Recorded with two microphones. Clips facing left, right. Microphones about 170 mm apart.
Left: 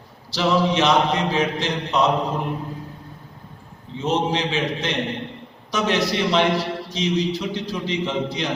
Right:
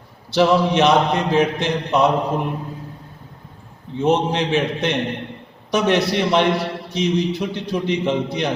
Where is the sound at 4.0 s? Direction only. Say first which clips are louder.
Right 4 dB; 60° right (ahead or behind).